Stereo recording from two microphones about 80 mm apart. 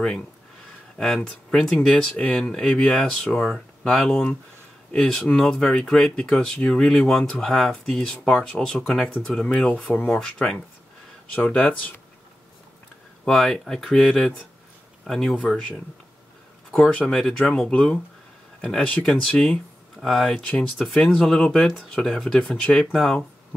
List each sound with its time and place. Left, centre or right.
0.9 s speech: centre
11.4 s speech: left
13.2 s speech: centre
16.7 s speech: centre